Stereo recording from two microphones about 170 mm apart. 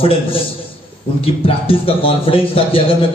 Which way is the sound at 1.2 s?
35° left (ahead or behind).